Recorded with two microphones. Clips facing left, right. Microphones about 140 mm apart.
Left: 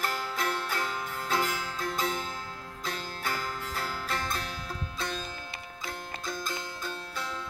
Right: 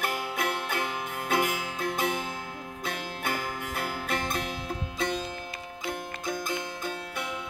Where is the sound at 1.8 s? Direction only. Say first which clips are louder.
Right 3 dB; 55° right (ahead or behind).